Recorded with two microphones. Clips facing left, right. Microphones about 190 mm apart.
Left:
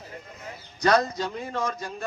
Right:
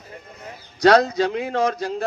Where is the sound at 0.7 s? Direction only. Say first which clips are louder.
Right 7 dB; 80° right.